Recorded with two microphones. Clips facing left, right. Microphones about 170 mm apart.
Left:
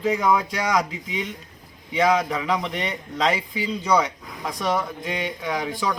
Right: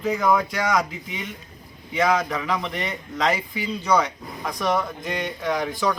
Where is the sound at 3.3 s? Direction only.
25° left (ahead or behind).